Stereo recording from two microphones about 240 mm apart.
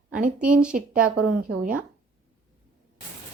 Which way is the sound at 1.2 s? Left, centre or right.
Right.